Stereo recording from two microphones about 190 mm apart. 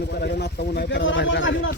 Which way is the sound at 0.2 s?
60° left (ahead or behind).